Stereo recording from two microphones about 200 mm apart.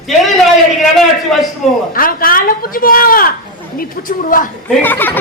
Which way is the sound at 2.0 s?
45° left (ahead or behind).